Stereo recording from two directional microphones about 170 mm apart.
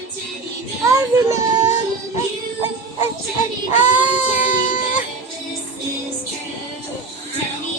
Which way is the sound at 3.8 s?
10° right (ahead or behind).